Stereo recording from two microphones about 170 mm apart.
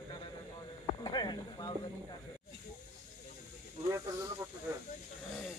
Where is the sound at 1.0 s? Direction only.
25° left (ahead or behind).